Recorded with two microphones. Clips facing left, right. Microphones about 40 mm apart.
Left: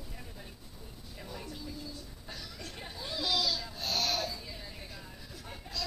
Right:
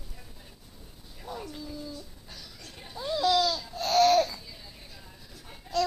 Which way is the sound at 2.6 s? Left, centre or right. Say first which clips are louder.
Right 2 dB; centre.